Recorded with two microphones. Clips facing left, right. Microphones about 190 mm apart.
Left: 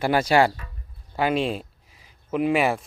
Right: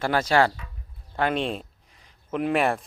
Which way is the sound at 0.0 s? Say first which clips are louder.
Left 2 dB; 10° left (ahead or behind).